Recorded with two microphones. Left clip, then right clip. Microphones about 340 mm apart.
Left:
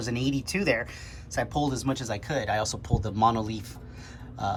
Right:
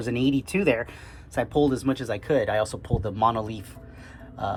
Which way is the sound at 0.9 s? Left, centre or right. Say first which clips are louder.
Right 1 dB; centre.